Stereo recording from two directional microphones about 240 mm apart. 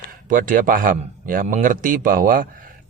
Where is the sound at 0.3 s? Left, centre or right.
Right.